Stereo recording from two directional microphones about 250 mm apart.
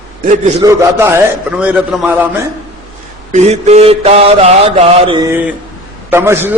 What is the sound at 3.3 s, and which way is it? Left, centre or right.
Mantra, right.